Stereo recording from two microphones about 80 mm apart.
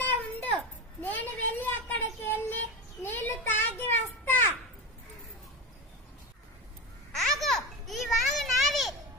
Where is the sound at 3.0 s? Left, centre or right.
Left.